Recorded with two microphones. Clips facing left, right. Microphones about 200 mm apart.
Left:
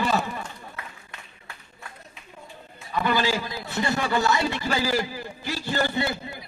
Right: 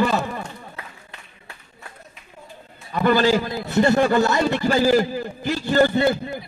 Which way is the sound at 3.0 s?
50° right (ahead or behind).